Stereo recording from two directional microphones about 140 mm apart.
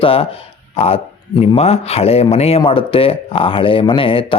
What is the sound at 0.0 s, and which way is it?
Speech, 40° left (ahead or behind).